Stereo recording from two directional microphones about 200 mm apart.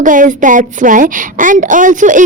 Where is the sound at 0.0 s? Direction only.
40° right (ahead or behind).